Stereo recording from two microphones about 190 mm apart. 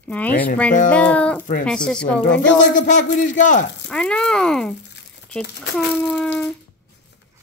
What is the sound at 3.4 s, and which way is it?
Speech, 40° left (ahead or behind).